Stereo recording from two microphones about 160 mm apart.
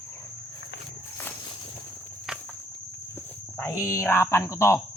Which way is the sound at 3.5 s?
15° left (ahead or behind).